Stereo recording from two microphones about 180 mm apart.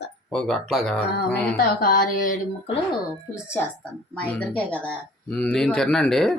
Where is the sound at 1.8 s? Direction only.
50° left (ahead or behind).